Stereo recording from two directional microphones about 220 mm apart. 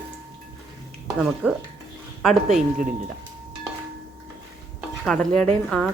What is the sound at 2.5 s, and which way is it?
Speech, 35° right (ahead or behind).